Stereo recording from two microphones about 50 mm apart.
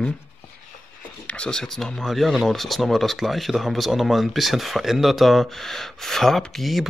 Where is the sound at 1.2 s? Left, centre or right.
Left.